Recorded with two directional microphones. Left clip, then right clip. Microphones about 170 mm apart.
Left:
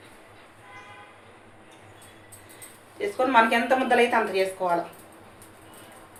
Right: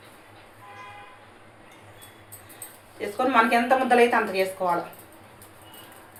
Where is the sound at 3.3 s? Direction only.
10° left (ahead or behind).